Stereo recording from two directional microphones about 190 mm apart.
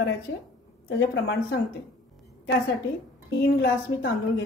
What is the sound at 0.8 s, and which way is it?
Speech, 75° left (ahead or behind).